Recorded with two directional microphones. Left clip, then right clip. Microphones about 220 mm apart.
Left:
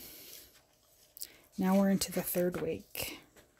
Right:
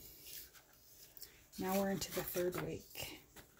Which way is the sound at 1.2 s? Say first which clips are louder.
Left 7 dB; 50° left (ahead or behind).